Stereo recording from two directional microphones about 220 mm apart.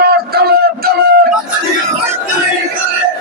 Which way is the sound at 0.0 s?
45° right (ahead or behind).